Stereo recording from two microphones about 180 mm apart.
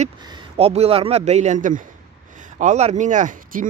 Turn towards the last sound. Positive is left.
turn(degrees=-45)  # may be behind; listen again after turning